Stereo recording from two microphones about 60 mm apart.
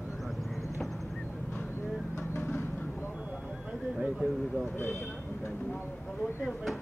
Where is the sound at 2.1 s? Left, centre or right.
Left.